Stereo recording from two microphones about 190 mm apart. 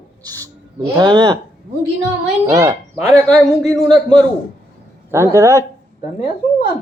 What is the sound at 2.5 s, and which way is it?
Speech, 15° right (ahead or behind).